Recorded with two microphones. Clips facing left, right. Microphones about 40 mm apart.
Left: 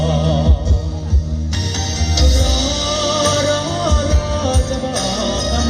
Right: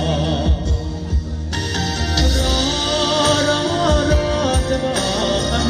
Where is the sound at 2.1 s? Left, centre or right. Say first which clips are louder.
Left 1 dB; centre.